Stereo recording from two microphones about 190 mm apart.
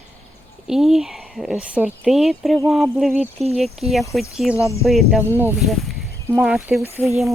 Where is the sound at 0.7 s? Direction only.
Centre (ahead or behind).